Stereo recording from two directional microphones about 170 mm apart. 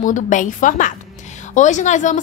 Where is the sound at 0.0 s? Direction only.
50° left (ahead or behind).